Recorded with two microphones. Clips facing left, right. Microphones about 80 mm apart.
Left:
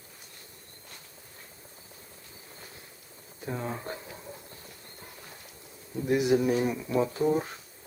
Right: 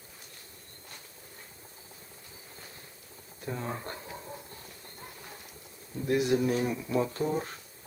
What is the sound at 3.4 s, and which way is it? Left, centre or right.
Speech, centre.